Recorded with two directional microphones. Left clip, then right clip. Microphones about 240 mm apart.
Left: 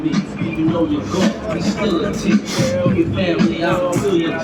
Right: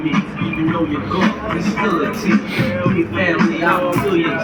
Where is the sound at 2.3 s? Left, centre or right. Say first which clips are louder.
Even; left.